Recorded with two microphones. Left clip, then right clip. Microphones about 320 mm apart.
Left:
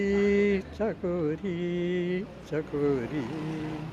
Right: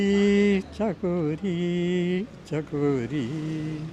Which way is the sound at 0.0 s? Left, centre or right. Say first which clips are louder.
Right 2 dB; right.